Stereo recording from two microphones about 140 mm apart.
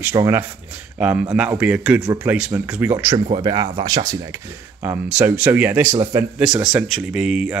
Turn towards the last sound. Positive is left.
turn(degrees=-5)  # may be behind; listen again after turning